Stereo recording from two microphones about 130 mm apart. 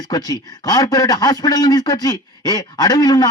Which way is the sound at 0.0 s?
30° left (ahead or behind).